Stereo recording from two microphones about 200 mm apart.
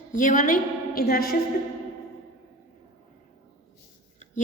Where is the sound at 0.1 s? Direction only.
40° left (ahead or behind).